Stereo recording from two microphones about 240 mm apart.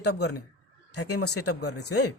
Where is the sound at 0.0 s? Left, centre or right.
Left.